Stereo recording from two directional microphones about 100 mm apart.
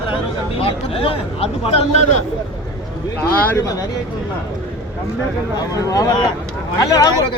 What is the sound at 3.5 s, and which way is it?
Speech, 35° left (ahead or behind).